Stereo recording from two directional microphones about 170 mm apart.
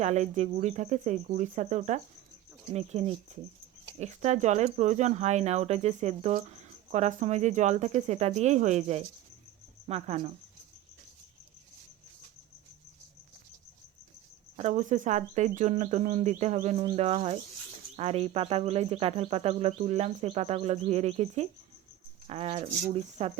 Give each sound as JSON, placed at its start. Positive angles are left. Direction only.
{"t": 0.0, "sound": "speech", "side_deg": -40}
{"t": 2.9, "sound": "cricket", "side_deg": -40}
{"t": 3.9, "sound": "speech", "side_deg": -40}
{"t": 9.8, "sound": "cricket", "side_deg": -35}
{"t": 14.5, "sound": "cricket", "side_deg": -40}